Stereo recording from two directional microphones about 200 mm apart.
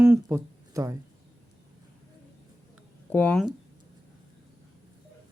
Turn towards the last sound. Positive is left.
turn(degrees=5)  # may be behind; listen again after turning